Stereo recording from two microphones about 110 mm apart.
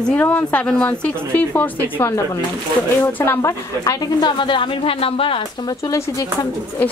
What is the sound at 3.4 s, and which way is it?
Speech, 30° left (ahead or behind).